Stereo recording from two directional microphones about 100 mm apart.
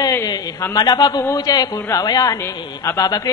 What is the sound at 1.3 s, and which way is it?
Music, 40° left (ahead or behind).